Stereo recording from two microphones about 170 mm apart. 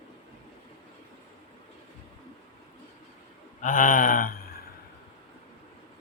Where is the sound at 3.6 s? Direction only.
50° left (ahead or behind).